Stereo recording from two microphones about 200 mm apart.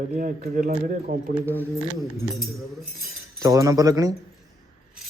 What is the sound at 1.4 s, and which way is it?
Speech, 10° right (ahead or behind).